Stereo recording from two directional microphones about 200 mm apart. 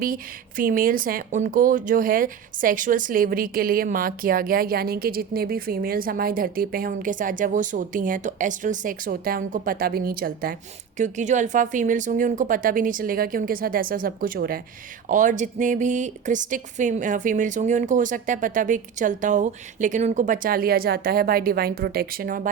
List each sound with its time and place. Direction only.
0.0 s speech: 45° right (ahead or behind)